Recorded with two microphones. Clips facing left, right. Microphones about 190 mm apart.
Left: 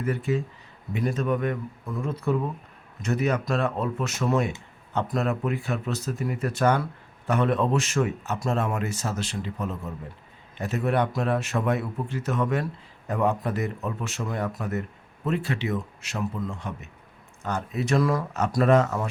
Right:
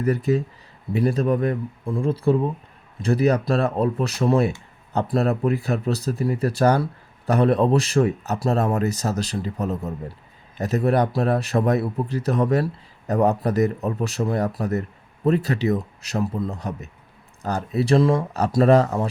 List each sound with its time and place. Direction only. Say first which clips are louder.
0.0 s a man's voice: right 5 dB; 40° right (ahead or behind)